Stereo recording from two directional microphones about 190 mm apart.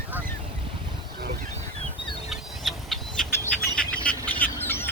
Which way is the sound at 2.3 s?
Centre (ahead or behind).